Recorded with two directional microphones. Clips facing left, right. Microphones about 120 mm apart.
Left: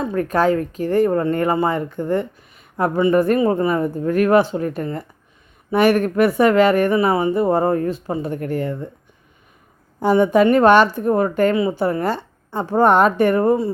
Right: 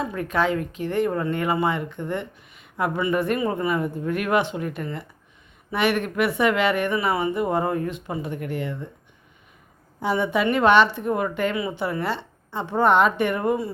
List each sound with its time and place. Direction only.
0.0 s speech: 40° left (ahead or behind)
10.0 s speech: 45° left (ahead or behind)